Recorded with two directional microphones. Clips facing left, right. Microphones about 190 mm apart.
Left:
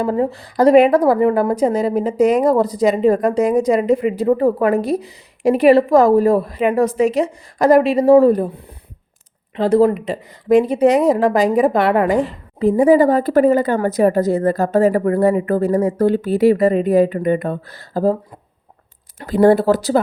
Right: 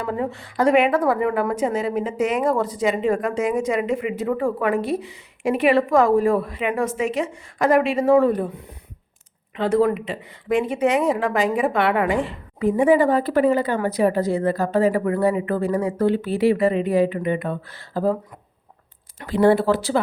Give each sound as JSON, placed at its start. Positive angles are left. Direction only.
{"t": 0.0, "sound": "a woman's voice", "side_deg": 35}
{"t": 19.2, "sound": "a woman's voice", "side_deg": 40}